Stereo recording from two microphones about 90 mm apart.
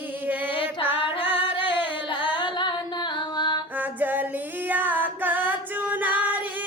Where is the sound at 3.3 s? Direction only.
55° left (ahead or behind).